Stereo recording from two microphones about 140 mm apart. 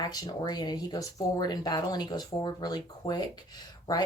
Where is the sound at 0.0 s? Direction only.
30° left (ahead or behind).